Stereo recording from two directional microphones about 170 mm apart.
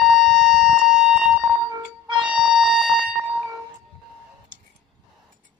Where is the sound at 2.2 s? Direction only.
5° right (ahead or behind).